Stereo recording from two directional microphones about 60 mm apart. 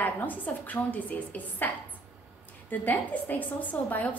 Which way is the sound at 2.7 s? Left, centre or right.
Left.